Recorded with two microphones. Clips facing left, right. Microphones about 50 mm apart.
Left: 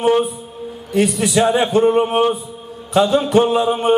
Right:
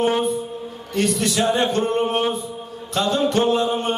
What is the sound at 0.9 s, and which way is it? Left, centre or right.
A man's voice, centre.